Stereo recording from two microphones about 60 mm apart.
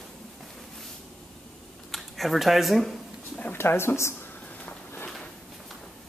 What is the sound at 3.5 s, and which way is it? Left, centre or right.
Speech, left.